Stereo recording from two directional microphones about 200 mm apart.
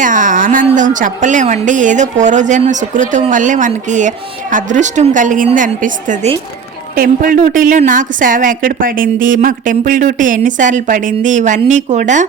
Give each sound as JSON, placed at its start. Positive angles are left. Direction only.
{"t": 0.0, "sound": "speech", "side_deg": -40}